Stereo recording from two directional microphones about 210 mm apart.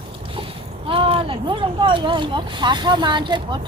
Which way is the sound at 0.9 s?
25° right (ahead or behind).